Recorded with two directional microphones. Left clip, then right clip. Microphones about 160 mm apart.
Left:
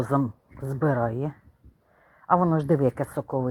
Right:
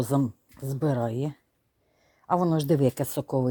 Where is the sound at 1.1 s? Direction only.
30° right (ahead or behind).